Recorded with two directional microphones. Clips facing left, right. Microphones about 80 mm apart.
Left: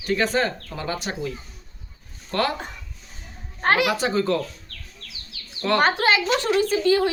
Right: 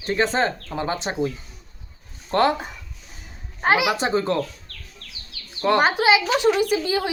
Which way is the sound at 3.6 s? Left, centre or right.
Centre.